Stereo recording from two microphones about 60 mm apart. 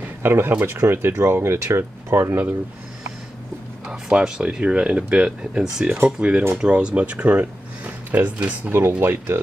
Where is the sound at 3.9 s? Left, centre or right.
Centre; by 8.7 s right.